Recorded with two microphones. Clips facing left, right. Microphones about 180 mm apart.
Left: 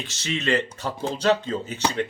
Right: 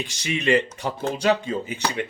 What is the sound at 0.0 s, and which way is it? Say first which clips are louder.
Speech: right 2 dB; 10° right (ahead or behind).